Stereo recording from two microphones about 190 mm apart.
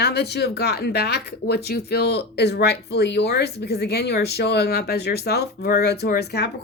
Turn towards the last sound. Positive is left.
turn(degrees=60)  # may be behind; listen again after turning